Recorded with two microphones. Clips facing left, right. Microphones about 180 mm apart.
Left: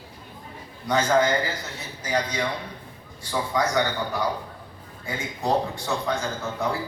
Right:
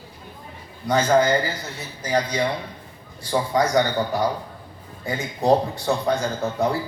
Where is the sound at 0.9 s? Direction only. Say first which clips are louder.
Right 3 dB; 35° right (ahead or behind).